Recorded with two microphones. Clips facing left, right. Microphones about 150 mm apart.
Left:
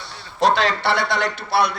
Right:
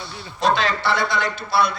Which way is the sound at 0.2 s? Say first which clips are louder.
Left 2 dB; 70° left (ahead or behind).